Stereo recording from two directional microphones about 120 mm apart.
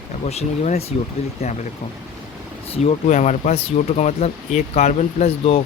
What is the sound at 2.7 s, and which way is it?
Speech, 60° left (ahead or behind).